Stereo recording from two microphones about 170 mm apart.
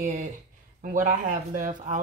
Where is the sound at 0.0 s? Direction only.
45° right (ahead or behind).